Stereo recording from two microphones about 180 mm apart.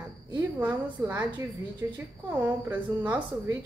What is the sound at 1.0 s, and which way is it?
A woman's voice, 15° right (ahead or behind).